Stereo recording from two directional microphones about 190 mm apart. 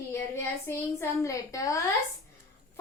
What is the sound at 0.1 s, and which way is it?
A woman's voice, 15° left (ahead or behind).